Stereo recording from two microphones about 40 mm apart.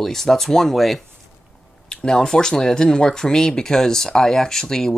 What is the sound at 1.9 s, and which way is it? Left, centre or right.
Speech, centre.